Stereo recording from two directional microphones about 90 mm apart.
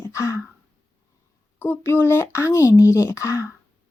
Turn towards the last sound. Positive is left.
turn(degrees=35)  # may be behind; listen again after turning